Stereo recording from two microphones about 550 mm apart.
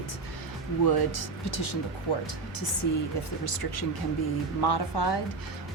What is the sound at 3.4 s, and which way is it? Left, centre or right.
Speech, left.